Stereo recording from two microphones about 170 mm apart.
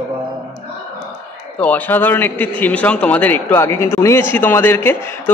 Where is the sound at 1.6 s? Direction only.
10° left (ahead or behind).